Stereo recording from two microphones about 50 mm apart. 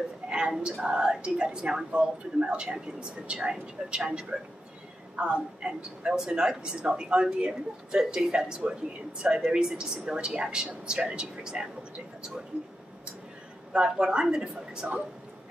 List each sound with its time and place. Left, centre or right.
0.3 s a woman's voice: centre
13.7 s a woman's voice: centre